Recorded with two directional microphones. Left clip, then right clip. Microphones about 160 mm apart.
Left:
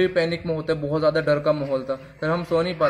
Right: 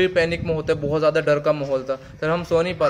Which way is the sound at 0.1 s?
15° right (ahead or behind).